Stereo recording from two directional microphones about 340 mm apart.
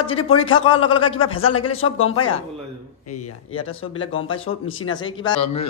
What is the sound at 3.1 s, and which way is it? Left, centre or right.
Speech, left.